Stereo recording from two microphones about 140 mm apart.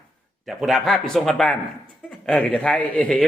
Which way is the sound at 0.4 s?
Centre (ahead or behind).